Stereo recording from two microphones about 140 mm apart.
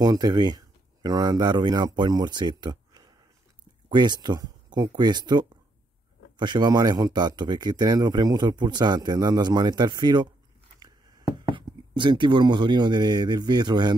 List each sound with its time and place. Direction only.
0.0 s speech: 30° right (ahead or behind)
11.3 s speech: 35° right (ahead or behind)